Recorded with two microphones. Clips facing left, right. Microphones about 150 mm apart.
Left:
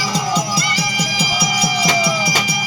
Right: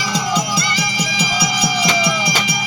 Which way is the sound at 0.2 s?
5° left (ahead or behind).